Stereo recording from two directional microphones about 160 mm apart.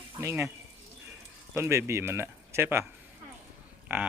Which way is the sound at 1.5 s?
15° right (ahead or behind).